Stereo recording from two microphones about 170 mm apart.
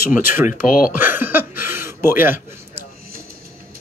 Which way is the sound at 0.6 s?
55° left (ahead or behind).